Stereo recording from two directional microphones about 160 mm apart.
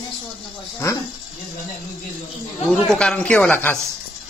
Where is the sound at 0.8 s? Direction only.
15° left (ahead or behind).